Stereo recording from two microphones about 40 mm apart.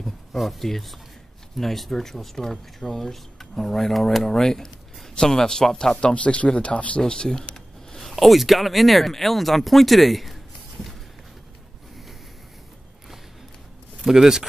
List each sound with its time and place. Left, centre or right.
0.0 s speech: centre
4.2 s speech: centre
5.9 s speech: left
7.0 s a sound: centre
8.1 s speech: centre
14.0 s speech: centre